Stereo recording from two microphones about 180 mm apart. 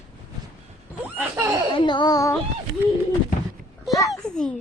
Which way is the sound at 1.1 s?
15° right (ahead or behind).